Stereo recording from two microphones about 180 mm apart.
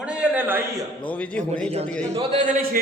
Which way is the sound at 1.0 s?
5° left (ahead or behind).